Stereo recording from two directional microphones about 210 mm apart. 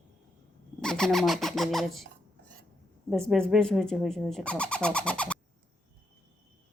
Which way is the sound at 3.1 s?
Centre (ahead or behind).